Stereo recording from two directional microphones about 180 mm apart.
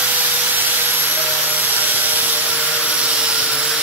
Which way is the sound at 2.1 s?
10° right (ahead or behind).